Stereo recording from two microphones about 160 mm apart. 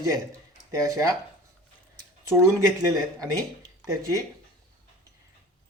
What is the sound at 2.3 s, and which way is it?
Speech, 20° right (ahead or behind).